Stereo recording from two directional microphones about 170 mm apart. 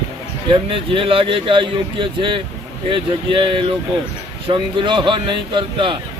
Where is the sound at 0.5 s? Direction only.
30° right (ahead or behind).